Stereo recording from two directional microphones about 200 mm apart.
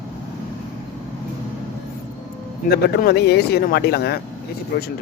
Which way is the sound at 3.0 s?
55° left (ahead or behind).